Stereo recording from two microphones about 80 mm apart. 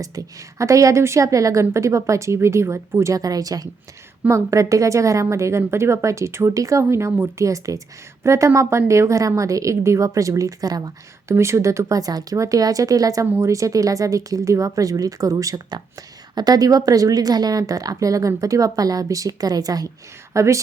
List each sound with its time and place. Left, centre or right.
0.0 s a woman's voice: right
4.3 s a woman's voice: right
6.8 s a woman's voice: right
11.3 s a woman's voice: right
20.3 s a woman's voice: right